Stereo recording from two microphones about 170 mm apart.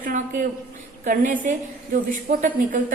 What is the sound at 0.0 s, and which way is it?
A man's voice, 50° right (ahead or behind).